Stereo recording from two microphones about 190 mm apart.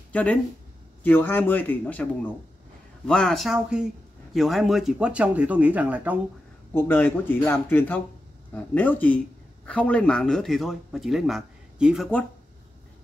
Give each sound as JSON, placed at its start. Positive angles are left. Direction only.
{"t": 0.1, "sound": "a man's voice", "side_deg": 5}
{"t": 6.7, "sound": "a man's voice", "side_deg": 10}